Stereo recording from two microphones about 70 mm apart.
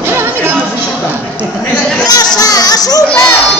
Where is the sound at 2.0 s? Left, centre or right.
Left.